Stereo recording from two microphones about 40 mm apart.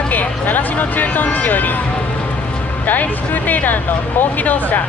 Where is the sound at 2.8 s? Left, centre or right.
Left.